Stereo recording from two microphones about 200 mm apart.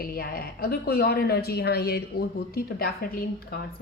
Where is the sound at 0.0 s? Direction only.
50° left (ahead or behind).